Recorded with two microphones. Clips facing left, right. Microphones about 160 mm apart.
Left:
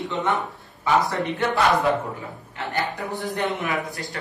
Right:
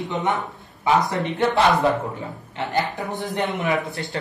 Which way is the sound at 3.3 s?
20° right (ahead or behind).